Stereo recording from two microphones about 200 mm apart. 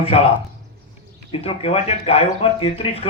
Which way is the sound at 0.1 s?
30° left (ahead or behind).